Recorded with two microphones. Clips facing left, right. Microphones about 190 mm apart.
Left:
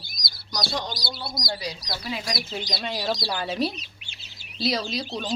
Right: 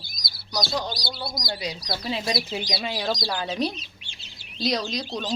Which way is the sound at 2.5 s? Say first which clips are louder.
Right 2 dB; 10° right (ahead or behind).